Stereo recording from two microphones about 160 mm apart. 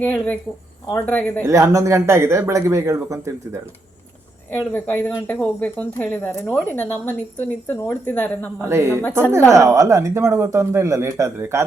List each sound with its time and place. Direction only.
0.0 s speech: 10° left (ahead or behind)
1.5 s speech: 20° right (ahead or behind)
4.7 s speech: 10° left (ahead or behind)
8.6 s speech: 15° right (ahead or behind)